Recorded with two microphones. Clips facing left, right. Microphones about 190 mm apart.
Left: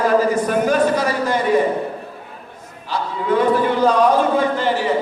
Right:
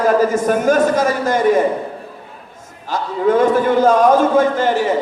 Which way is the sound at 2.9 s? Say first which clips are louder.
Right 4 dB; 45° right (ahead or behind).